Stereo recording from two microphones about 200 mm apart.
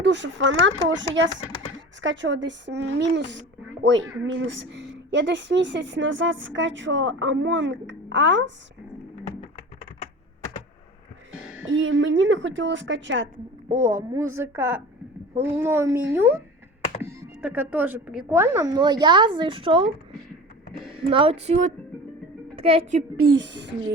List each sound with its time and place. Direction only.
0.0 s a woman's voice: 65° right (ahead or behind)
2.0 s a woman's voice: 65° right (ahead or behind)
11.6 s a woman's voice: 70° right (ahead or behind)
13.7 s speech: 15° right (ahead or behind)
21.1 s a woman's voice: 25° right (ahead or behind)
23.1 s a woman's voice: 80° right; by 23.7 s 60° right (ahead or behind)